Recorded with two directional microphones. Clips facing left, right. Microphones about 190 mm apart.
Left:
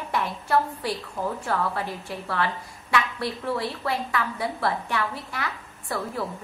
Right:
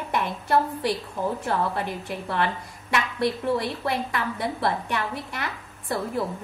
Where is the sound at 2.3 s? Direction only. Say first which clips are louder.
Right 1 dB; 20° right (ahead or behind).